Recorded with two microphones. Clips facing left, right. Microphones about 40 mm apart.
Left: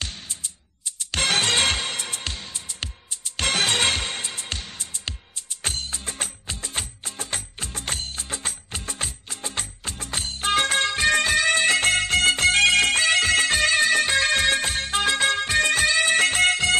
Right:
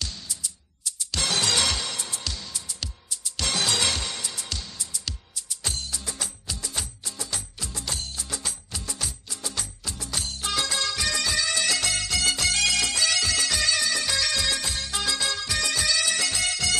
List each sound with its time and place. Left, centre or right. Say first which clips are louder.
0.0 s music: left 1 dB; left